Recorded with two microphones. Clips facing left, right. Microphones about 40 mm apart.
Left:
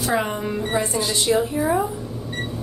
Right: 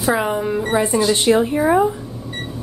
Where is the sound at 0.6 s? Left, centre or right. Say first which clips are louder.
Right 3 dB; right.